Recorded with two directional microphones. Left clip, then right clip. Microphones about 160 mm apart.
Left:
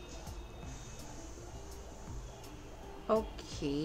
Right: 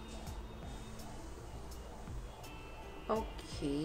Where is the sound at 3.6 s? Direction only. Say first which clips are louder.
Left 1 dB; 25° left (ahead or behind).